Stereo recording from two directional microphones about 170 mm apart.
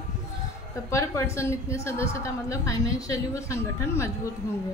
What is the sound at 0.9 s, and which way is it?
A woman's voice, 15° left (ahead or behind).